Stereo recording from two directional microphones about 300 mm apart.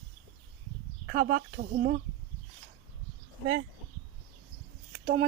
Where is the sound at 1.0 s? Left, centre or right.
Right.